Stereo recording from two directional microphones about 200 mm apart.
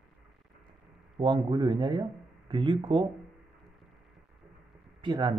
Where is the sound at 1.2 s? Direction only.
25° right (ahead or behind).